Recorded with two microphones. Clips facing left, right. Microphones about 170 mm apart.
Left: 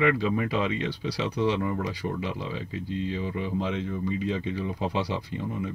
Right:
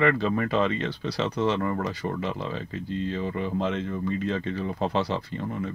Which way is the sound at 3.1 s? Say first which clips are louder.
Right 3 dB; 50° right (ahead or behind).